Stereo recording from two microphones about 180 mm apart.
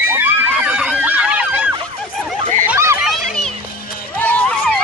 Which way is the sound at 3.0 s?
5° left (ahead or behind).